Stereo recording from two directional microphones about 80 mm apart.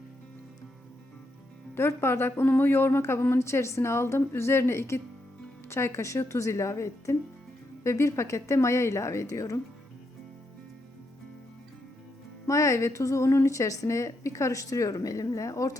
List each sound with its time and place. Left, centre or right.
1.7 s a woman's voice: left
12.5 s a woman's voice: left